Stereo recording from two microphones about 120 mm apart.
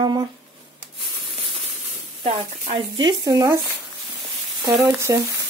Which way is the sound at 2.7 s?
40° right (ahead or behind).